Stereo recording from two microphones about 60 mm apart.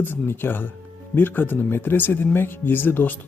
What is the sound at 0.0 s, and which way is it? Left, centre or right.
Speech, left.